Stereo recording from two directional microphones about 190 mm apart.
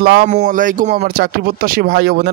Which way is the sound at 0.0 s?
55° right (ahead or behind).